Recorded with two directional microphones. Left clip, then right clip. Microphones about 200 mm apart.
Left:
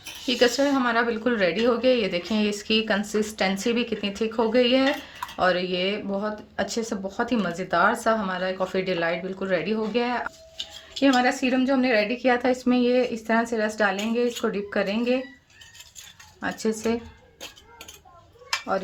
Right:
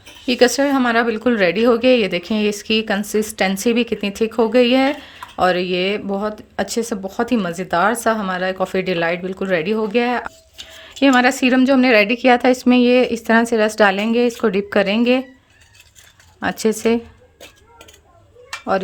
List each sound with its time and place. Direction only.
0.3 s speech: 35° right (ahead or behind)
16.4 s speech: 40° right (ahead or behind)